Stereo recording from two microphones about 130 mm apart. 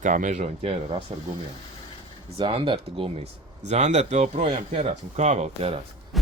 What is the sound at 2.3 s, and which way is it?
Speech, 45° right (ahead or behind).